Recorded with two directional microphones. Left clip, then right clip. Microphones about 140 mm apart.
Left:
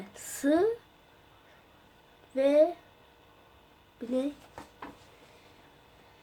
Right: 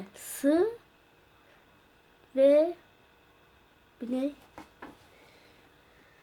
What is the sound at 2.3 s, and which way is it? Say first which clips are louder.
Speech: right 2 dB; 60° right (ahead or behind).